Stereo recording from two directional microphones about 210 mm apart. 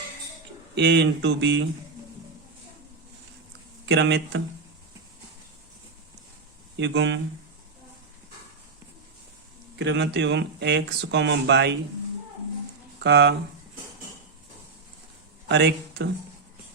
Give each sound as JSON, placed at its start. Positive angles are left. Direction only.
{"t": 0.8, "sound": "speech", "side_deg": -55}
{"t": 3.8, "sound": "speech", "side_deg": -55}
{"t": 6.7, "sound": "speech", "side_deg": -60}
{"t": 9.7, "sound": "speech", "side_deg": -60}
{"t": 13.0, "sound": "speech", "side_deg": -55}
{"t": 15.4, "sound": "speech", "side_deg": -55}